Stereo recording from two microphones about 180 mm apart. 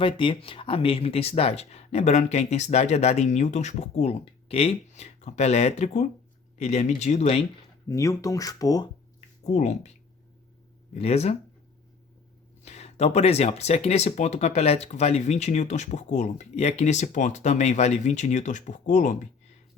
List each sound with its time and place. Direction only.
0.0 s speech: 30° left (ahead or behind)
7.9 s speech: 15° left (ahead or behind)
9.4 s speech: 40° left (ahead or behind)
10.9 s speech: 35° left (ahead or behind)
12.6 s speech: 35° left (ahead or behind)